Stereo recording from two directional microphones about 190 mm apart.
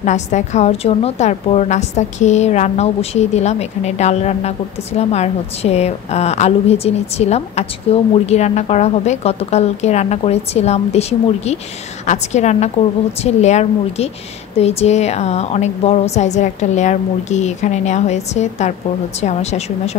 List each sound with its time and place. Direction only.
0.0 s a woman's voice: 40° left (ahead or behind)